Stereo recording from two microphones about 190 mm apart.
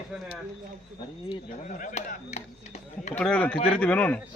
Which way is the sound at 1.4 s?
45° left (ahead or behind).